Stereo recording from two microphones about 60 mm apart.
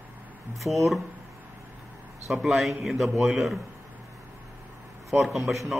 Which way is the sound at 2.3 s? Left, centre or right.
Centre.